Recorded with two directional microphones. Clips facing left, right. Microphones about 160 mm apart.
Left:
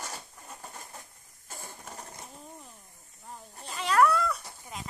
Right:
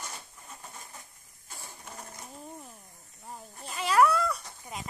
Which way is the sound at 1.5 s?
45° left (ahead or behind).